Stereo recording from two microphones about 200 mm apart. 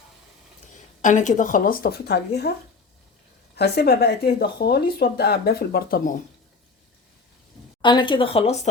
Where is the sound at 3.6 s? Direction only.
55° left (ahead or behind).